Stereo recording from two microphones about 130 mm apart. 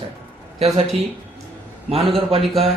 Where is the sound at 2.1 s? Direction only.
45° right (ahead or behind).